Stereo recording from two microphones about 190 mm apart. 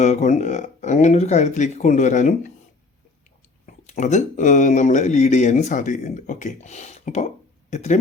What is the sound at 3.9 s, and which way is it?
Speech, 40° left (ahead or behind).